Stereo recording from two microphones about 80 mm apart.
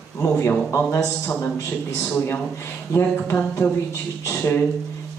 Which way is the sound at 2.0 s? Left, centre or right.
Left.